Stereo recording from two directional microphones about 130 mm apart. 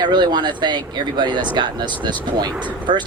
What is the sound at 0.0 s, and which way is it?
Speech, 35° right (ahead or behind).